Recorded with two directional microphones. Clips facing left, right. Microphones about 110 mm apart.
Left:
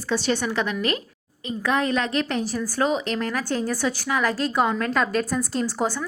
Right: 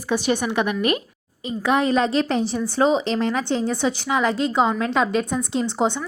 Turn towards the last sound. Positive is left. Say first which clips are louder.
# right 3 dB
turn(degrees=-20)  # may be behind; listen again after turning